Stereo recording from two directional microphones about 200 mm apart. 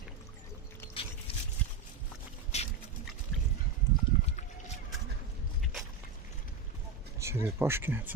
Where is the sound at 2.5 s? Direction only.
35° left (ahead or behind).